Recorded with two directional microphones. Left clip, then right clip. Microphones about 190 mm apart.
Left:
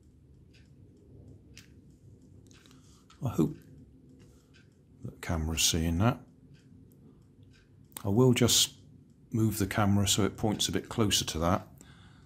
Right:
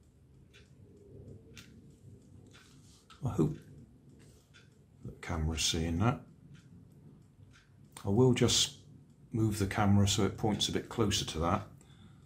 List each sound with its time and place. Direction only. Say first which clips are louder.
3.2 s speech: left 3 dB; 45° left (ahead or behind)
5.2 s speech: left 4 dB; 55° left (ahead or behind)
7.9 s speech: left 2 dB; 55° left (ahead or behind)